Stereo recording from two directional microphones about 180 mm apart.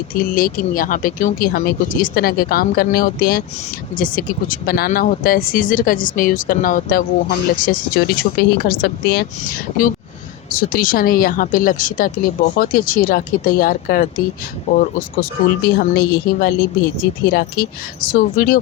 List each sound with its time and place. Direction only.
0.1 s speech: 50° left (ahead or behind)
10.5 s speech: 50° left (ahead or behind)